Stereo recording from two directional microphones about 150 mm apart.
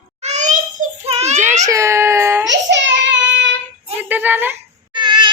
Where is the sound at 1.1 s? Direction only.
45° right (ahead or behind).